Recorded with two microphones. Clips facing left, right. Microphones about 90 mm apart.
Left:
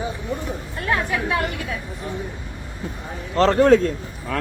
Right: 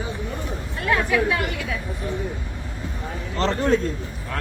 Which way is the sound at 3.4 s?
50° left (ahead or behind).